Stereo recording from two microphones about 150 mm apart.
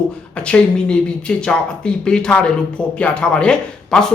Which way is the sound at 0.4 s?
5° left (ahead or behind).